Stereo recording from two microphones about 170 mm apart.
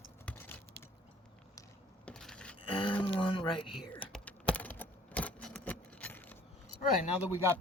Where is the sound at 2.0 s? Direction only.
5° left (ahead or behind).